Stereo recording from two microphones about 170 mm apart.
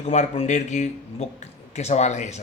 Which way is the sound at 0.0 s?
40° left (ahead or behind).